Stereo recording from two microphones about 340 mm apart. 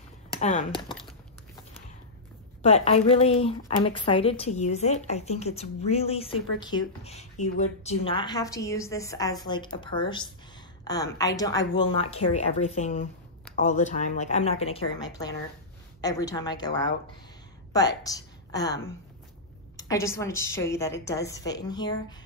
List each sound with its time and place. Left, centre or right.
0.4 s speech: left
2.6 s a woman's voice: centre
17.7 s a woman's voice: centre
19.8 s a woman's voice: centre